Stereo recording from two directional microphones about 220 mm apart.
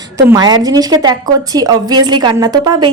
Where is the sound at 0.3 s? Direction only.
15° right (ahead or behind).